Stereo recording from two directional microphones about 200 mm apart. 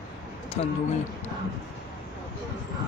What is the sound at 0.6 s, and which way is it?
Speech, 30° left (ahead or behind).